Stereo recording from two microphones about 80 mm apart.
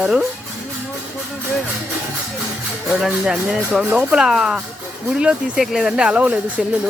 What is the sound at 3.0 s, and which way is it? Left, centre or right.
Speech, centre.